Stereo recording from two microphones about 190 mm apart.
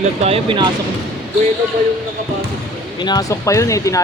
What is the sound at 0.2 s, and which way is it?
Speech, 30° right (ahead or behind).